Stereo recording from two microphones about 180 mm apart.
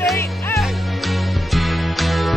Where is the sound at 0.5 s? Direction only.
Centre (ahead or behind).